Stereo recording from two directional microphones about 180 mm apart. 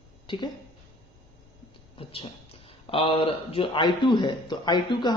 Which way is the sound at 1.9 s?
30° left (ahead or behind).